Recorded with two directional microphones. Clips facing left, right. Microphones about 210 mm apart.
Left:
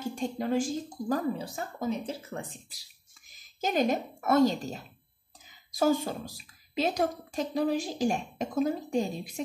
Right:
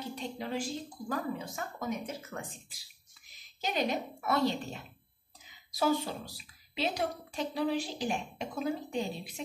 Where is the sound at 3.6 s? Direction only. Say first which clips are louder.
Left 5 dB; 45° left (ahead or behind).